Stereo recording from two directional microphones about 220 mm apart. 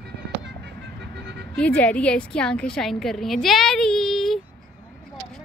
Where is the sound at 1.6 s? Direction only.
5° left (ahead or behind).